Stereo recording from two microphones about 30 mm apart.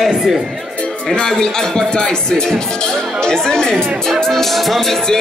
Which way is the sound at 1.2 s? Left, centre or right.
Left.